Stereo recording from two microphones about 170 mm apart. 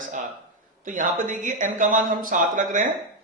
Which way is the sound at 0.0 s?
50° right (ahead or behind).